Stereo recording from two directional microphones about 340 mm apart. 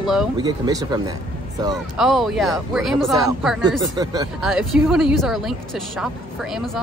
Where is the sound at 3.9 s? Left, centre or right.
Centre.